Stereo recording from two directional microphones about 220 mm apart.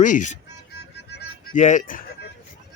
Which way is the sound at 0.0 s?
35° left (ahead or behind).